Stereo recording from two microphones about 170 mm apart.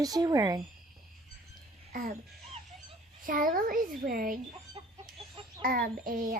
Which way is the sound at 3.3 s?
55° right (ahead or behind).